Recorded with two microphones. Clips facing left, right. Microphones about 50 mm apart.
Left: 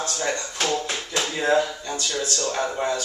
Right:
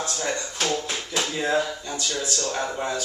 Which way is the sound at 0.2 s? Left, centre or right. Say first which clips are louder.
Left 2 dB; centre.